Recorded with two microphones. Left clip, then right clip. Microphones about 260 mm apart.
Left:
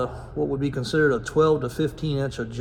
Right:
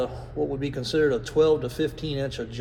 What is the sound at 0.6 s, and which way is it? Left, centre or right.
Speech, centre.